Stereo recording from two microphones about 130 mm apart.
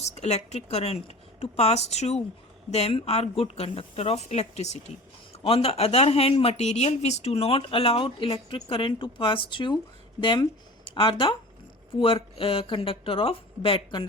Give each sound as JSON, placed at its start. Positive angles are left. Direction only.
{"t": 0.0, "sound": "a woman's voice", "side_deg": 55}